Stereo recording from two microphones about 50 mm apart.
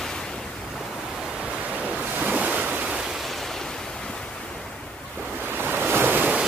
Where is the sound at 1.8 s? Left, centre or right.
Right.